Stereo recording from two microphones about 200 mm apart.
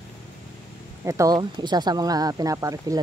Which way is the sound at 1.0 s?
15° right (ahead or behind).